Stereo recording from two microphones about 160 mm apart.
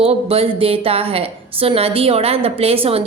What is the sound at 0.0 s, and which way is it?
A woman's voice, 35° right (ahead or behind).